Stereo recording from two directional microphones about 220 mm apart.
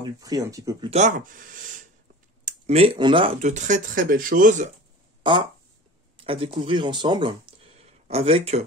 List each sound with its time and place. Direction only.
0.0 s speech: 15° right (ahead or behind)
0.8 s speech: 30° right (ahead or behind)
5.2 s a sound: 20° right (ahead or behind)
6.1 s speech: 25° right (ahead or behind)